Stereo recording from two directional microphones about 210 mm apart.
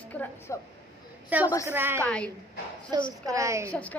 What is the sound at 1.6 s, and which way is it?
Speech, 10° right (ahead or behind).